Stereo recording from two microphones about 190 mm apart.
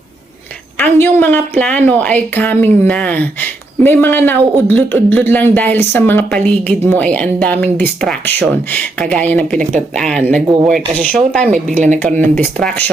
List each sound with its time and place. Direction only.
0.8 s a woman's voice: 10° left (ahead or behind)
10.4 s speech: 20° right (ahead or behind)
10.7 s a woman's voice: 5° left (ahead or behind)